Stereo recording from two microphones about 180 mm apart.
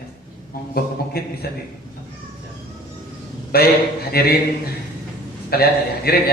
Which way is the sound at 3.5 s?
55° left (ahead or behind).